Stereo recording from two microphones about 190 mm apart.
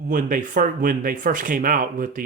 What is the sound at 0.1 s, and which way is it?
Speech, 45° right (ahead or behind).